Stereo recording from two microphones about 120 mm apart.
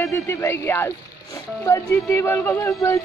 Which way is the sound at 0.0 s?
25° left (ahead or behind).